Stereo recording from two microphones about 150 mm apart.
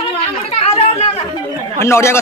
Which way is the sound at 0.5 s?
45° left (ahead or behind).